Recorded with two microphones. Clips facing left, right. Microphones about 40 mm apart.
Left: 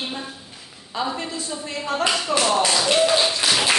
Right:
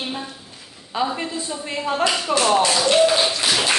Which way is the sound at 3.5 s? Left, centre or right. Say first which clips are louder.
Even; centre.